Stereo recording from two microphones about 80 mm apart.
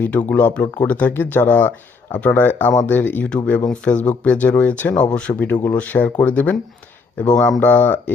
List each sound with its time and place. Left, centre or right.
0.0 s speech: left
3.2 s speech: centre